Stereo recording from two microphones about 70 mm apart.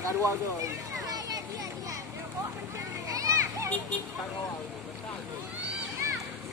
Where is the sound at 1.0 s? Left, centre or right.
Right.